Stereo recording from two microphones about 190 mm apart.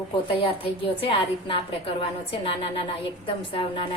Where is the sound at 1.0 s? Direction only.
30° left (ahead or behind).